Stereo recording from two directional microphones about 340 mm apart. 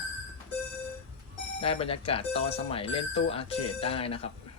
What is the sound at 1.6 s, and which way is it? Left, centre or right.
Speech, centre.